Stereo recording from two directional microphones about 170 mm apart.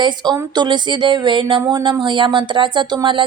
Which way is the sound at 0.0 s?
25° right (ahead or behind).